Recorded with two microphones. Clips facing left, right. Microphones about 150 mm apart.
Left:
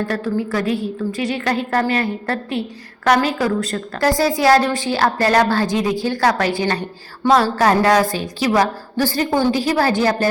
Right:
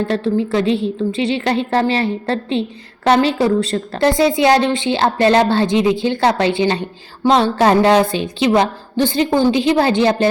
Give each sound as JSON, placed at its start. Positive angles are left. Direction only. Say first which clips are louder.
{"t": 0.1, "sound": "a woman's voice", "louder": "right 4 dB", "side_deg": -25}